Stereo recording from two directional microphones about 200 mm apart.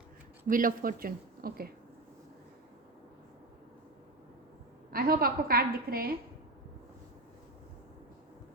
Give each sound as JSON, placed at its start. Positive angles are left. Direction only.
{"t": 0.4, "sound": "a woman's voice", "side_deg": -45}
{"t": 4.9, "sound": "a woman's voice", "side_deg": -45}